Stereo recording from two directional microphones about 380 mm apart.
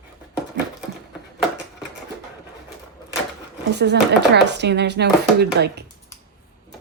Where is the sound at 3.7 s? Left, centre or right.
Right.